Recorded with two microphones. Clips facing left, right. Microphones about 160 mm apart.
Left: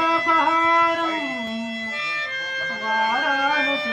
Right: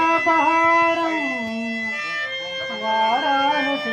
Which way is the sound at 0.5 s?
65° right (ahead or behind).